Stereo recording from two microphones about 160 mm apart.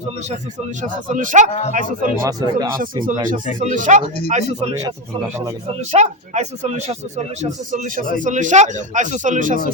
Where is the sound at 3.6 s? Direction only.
50° right (ahead or behind).